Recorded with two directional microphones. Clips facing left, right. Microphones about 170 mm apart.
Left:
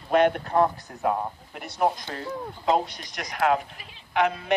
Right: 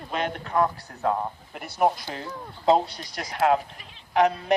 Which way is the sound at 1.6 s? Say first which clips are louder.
Right 2 dB; 5° right (ahead or behind).